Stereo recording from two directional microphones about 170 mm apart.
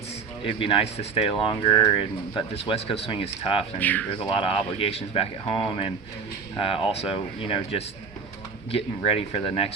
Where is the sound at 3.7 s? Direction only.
10° left (ahead or behind).